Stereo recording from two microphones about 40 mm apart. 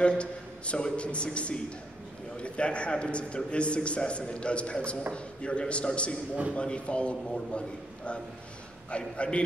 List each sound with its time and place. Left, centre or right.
0.2 s a man's voice: left